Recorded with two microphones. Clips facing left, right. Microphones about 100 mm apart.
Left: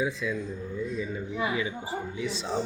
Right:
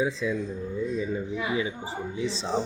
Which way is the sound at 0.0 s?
25° right (ahead or behind).